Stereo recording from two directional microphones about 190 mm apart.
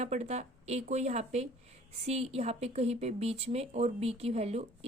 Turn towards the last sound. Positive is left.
turn(degrees=-35)  # may be behind; listen again after turning